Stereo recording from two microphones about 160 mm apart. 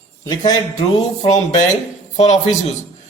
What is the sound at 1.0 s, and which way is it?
Music, 45° left (ahead or behind).